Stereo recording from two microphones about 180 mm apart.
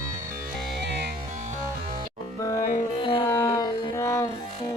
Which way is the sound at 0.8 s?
70° right (ahead or behind).